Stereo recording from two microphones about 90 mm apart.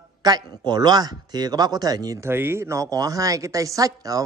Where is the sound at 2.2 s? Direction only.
25° right (ahead or behind).